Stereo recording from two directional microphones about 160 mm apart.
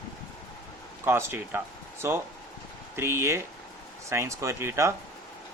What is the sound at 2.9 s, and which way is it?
Speech, 15° right (ahead or behind).